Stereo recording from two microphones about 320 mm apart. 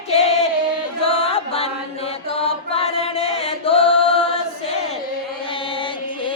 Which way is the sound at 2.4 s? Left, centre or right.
Centre.